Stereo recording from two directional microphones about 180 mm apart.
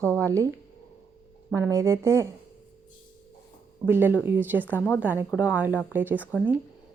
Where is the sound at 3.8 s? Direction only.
10° right (ahead or behind).